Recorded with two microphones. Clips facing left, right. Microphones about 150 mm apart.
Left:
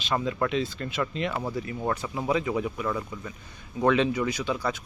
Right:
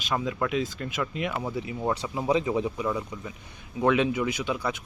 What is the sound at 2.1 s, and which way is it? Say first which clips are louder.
Speech: right 2 dB; 20° right (ahead or behind).